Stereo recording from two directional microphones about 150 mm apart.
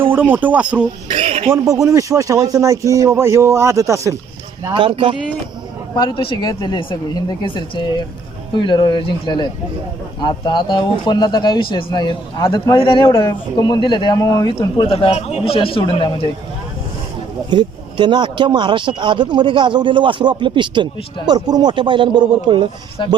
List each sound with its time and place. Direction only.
0.0 s speech: 15° right (ahead or behind)
1.1 s a sound: 45° right (ahead or behind)
1.5 s speech: 20° right (ahead or behind)
4.7 s speech: 35° right (ahead or behind)
6.0 s speech: 30° left (ahead or behind)
14.6 s speech: 35° left (ahead or behind)
17.5 s speech: 30° right (ahead or behind)
23.0 s speech: 30° left (ahead or behind)